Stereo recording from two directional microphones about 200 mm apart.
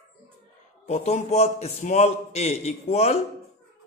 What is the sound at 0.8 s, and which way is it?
A man's voice, 35° left (ahead or behind).